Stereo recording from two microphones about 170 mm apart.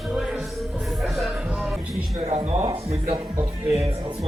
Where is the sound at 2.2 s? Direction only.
35° right (ahead or behind).